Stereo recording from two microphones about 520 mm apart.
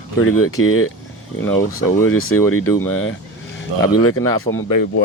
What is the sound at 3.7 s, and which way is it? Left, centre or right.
Speech, right.